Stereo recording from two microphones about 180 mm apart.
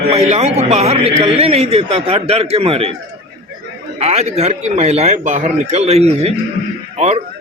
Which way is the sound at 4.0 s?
35° right (ahead or behind).